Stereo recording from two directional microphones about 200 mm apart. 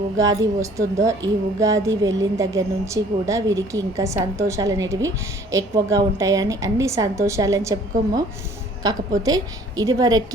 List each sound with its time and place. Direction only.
0.2 s a woman's voice: 15° right (ahead or behind)